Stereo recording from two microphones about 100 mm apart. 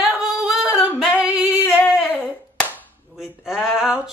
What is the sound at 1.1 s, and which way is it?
Singing, 10° right (ahead or behind).